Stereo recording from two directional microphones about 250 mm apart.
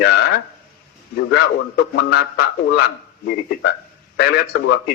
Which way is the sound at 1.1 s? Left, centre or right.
Left.